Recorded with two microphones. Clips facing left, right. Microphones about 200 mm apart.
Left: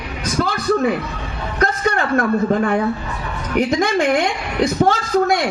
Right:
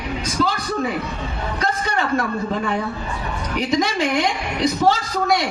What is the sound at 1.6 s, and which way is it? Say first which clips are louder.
A man's voice: left 5 dB; 55° left (ahead or behind).